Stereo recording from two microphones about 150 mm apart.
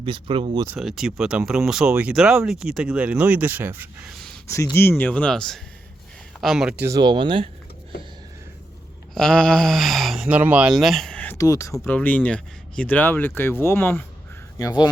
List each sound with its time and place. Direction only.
0.0 s speech: 35° right (ahead or behind)
0.8 s speech: centre (ahead or behind)
4.4 s speech: 20° left (ahead or behind); by 6.8 s 5° right (ahead or behind)
6.8 s speech: 25° right (ahead or behind)
9.1 s speech: 5° left (ahead or behind); by 11.7 s 20° left (ahead or behind)
11.7 s speech: 10° left (ahead or behind)
14.6 s speech: 25° left (ahead or behind)